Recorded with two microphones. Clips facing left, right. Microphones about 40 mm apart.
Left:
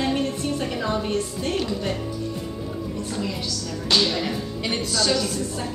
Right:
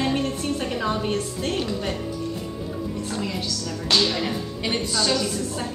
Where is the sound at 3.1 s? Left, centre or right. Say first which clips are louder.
Even; centre.